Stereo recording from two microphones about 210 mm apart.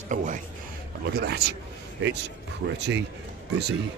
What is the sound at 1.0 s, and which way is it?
Speech, 50° right (ahead or behind).